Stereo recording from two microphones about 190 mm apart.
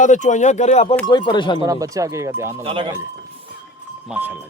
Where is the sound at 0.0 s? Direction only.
40° left (ahead or behind).